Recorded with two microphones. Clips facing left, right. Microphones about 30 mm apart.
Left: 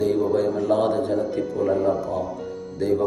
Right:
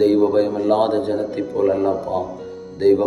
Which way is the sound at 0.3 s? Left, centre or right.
Right.